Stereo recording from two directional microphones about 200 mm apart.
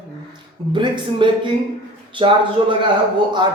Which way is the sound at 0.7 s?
25° right (ahead or behind).